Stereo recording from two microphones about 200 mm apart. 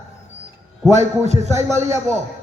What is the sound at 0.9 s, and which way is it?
A man's voice, 35° right (ahead or behind).